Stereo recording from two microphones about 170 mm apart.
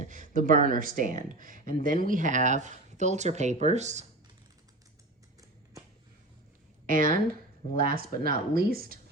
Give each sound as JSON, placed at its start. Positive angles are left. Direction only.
{"t": 0.0, "sound": "speech", "side_deg": -50}
{"t": 6.8, "sound": "speech", "side_deg": -55}